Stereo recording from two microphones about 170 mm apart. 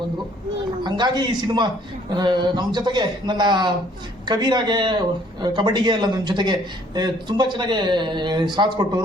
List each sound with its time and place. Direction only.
0.9 s speech: 25° right (ahead or behind)